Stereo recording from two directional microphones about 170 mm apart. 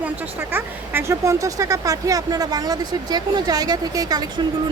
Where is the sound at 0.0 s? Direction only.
10° right (ahead or behind).